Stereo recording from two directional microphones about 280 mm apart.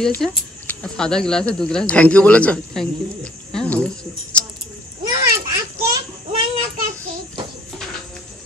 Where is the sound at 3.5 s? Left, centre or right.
Centre.